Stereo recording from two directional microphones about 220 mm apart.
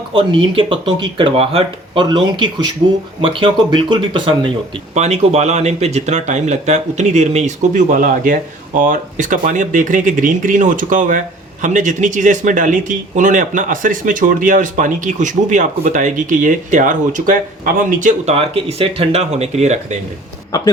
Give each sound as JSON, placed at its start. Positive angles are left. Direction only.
{"t": 0.1, "sound": "speech", "side_deg": -25}